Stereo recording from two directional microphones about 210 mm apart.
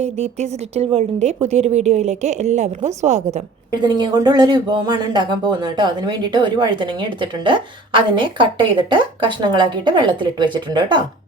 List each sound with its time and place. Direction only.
0.0 s a woman's voice: 30° right (ahead or behind)
3.7 s speech: 20° right (ahead or behind)